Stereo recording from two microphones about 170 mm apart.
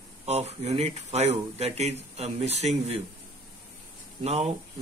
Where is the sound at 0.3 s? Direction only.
40° right (ahead or behind).